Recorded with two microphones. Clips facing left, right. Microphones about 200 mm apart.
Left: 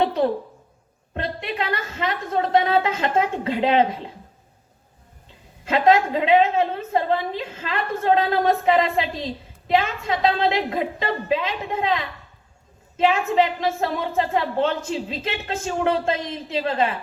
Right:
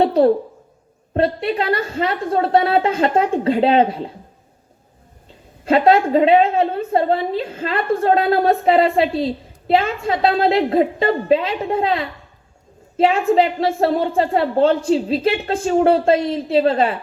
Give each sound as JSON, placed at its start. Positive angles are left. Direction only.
{"t": 0.0, "sound": "a sound", "side_deg": -35}
{"t": 1.1, "sound": "a woman's voice", "side_deg": -35}
{"t": 5.6, "sound": "a woman's voice", "side_deg": -35}